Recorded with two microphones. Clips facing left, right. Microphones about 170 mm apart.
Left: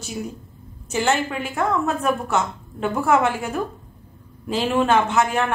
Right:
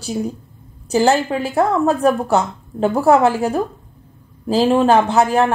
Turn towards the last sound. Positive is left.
turn(degrees=-35)  # may be behind; listen again after turning